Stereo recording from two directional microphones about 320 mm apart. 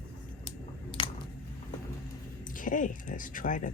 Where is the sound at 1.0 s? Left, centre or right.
Centre.